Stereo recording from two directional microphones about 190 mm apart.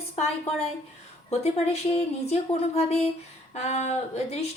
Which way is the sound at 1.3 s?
35° left (ahead or behind).